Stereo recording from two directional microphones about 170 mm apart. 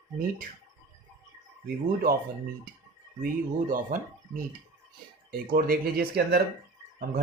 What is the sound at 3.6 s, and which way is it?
Speech, 50° right (ahead or behind).